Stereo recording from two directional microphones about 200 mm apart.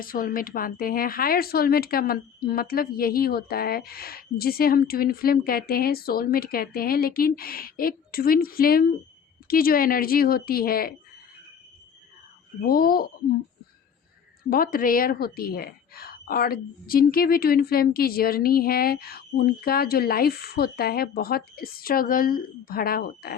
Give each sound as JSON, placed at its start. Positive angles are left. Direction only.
{"t": 0.0, "sound": "a woman's voice", "side_deg": 45}
{"t": 12.6, "sound": "a woman's voice", "side_deg": 45}
{"t": 14.5, "sound": "a woman's voice", "side_deg": 45}